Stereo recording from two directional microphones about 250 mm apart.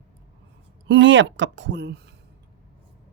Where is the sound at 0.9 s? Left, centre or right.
Right.